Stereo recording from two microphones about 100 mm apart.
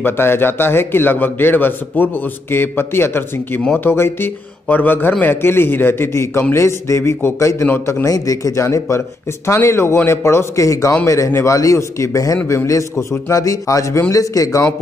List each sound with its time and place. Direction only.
0.0 s a man's voice: 20° left (ahead or behind)